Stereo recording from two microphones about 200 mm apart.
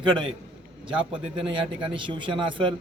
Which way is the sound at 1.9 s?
25° right (ahead or behind).